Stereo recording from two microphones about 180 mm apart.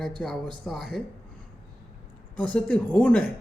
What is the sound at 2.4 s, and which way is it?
Speech, 5° left (ahead or behind).